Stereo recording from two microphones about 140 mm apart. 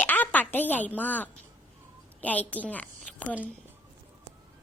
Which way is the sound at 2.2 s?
10° left (ahead or behind).